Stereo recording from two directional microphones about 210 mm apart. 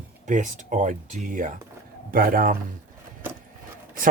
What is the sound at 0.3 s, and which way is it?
A man's voice, 35° right (ahead or behind).